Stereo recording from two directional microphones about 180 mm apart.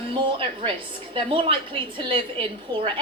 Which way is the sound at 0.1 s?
30° right (ahead or behind).